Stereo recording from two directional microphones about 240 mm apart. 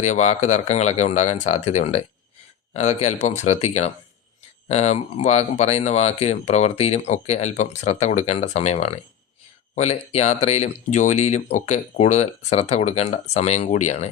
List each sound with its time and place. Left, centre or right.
0.0 s speech: left